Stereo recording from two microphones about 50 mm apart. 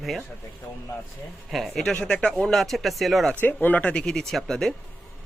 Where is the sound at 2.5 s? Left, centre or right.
Centre.